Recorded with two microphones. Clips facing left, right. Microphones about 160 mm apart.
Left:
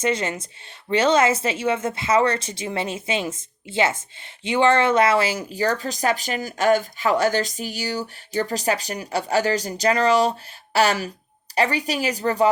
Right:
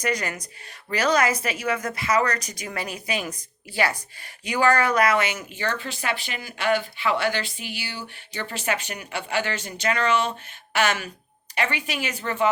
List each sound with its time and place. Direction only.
0.0 s speech: 25° left (ahead or behind)